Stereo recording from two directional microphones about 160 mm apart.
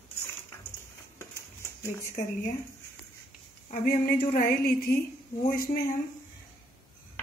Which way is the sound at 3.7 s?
65° left (ahead or behind).